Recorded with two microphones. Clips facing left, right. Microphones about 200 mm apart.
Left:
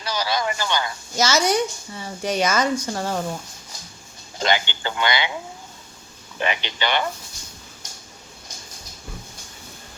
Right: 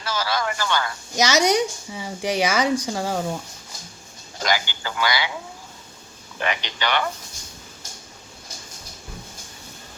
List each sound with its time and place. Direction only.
0.0 s speech: 15° left (ahead or behind)
1.1 s a woman's voice: 15° right (ahead or behind)
4.4 s speech: 25° left (ahead or behind)
6.4 s speech: 20° left (ahead or behind)